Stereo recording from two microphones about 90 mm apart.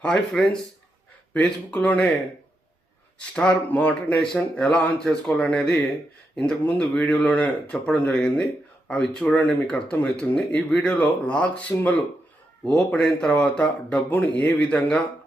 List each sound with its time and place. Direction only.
0.0 s speech: 5° left (ahead or behind)
3.3 s speech: 10° left (ahead or behind)